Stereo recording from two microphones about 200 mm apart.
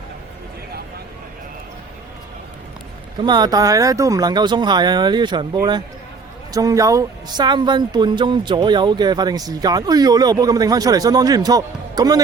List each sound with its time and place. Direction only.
3.2 s speech: 20° right (ahead or behind)